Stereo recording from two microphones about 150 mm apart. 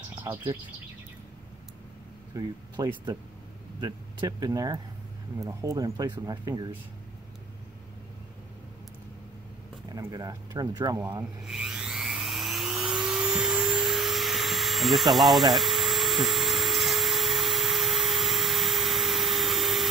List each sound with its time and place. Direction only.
2.3 s speech: 25° right (ahead or behind)
9.9 s speech: 25° right (ahead or behind)
11.4 s a sound: 5° right (ahead or behind)